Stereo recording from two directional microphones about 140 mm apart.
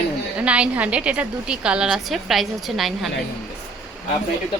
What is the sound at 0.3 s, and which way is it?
A woman's voice, 10° right (ahead or behind).